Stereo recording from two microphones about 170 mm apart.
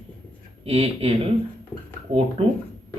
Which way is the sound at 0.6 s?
35° right (ahead or behind).